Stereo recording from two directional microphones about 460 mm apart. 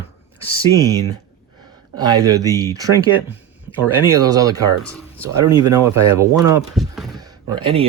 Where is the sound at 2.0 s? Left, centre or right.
Centre.